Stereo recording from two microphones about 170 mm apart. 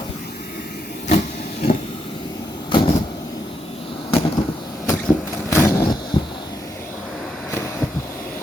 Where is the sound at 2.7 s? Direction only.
30° left (ahead or behind).